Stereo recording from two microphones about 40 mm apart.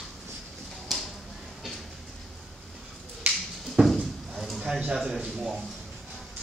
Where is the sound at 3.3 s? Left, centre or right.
Right.